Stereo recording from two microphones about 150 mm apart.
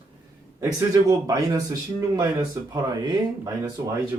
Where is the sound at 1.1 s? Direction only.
25° right (ahead or behind).